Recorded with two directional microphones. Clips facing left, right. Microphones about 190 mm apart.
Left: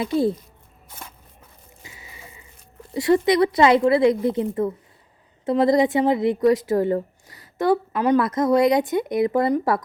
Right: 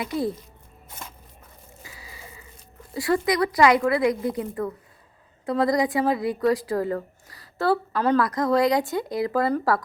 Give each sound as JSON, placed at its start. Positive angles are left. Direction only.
{"t": 0.0, "sound": "a woman's voice", "side_deg": 25}
{"t": 1.8, "sound": "scrape", "side_deg": 25}
{"t": 2.9, "sound": "a woman's voice", "side_deg": 20}